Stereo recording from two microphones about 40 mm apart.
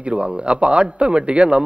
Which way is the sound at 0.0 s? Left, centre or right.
Right.